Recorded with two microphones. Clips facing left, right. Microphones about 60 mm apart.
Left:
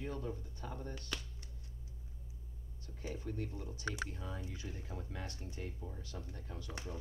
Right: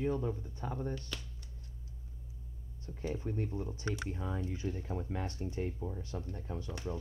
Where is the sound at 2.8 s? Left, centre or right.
Right.